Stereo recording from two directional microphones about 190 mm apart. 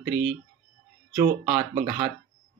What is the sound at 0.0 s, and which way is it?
Speech, 60° right (ahead or behind).